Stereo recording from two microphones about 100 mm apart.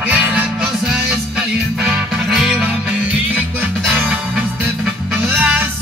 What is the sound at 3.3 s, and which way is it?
Music, 20° right (ahead or behind).